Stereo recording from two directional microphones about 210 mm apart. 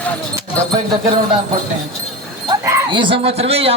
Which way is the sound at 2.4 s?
15° right (ahead or behind).